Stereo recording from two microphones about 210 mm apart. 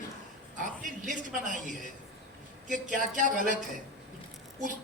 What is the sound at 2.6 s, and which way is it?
Speech, 35° right (ahead or behind).